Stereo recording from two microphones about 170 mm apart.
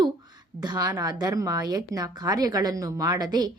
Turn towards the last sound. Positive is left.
turn(degrees=-25)  # may be behind; listen again after turning